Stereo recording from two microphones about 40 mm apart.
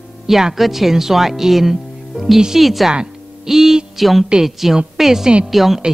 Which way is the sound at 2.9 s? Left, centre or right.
Centre.